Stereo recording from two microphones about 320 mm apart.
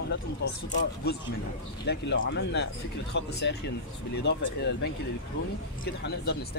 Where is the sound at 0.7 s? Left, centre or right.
Left.